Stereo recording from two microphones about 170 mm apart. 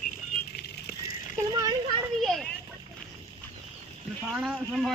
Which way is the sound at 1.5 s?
20° right (ahead or behind).